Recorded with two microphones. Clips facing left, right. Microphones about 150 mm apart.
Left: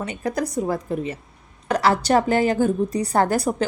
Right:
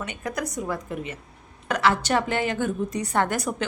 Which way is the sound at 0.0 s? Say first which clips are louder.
Left 5 dB; 35° left (ahead or behind).